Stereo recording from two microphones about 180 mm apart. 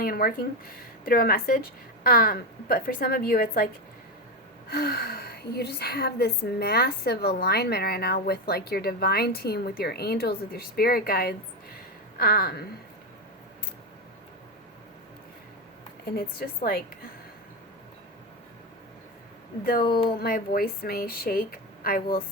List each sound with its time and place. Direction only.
0.0 s a woman's voice: 55° left (ahead or behind)
4.7 s a woman's voice: 60° left (ahead or behind)
16.1 s a woman's voice: 55° left (ahead or behind)
19.6 s a woman's voice: 55° left (ahead or behind)